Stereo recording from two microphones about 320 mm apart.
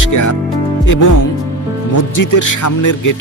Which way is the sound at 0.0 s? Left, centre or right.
Left.